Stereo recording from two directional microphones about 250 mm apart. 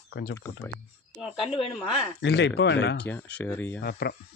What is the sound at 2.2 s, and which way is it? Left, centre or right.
Speech, left.